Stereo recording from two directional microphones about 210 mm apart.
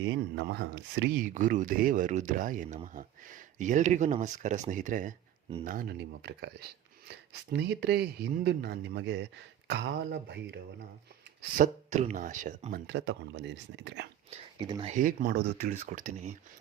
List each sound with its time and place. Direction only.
0.0 s speech: 60° right (ahead or behind)
1.2 s speech: 40° right (ahead or behind)
5.6 s speech: 45° right (ahead or behind)
11.5 s speech: 35° right (ahead or behind)
12.9 s speech: 55° right (ahead or behind)
14.6 s speech: 25° right (ahead or behind)